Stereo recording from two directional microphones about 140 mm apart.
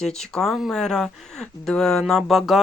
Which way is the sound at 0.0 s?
5° left (ahead or behind).